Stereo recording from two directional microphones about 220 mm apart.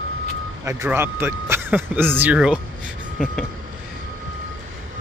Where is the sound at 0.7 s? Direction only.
10° right (ahead or behind).